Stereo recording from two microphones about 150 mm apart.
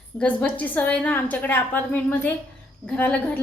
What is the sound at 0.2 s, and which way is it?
A woman's voice, 10° left (ahead or behind).